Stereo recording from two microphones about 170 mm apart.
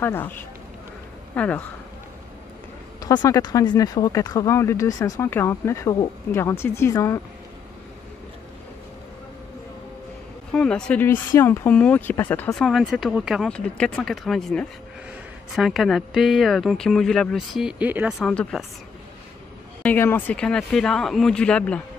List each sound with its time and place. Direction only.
0.0 s speech: 10° left (ahead or behind)
3.0 s speech: 20° left (ahead or behind)
10.5 s speech: 5° left (ahead or behind)
12.6 s speech: centre (ahead or behind)
18.2 s speech: 5° left (ahead or behind)
19.8 s speech: 10° left (ahead or behind)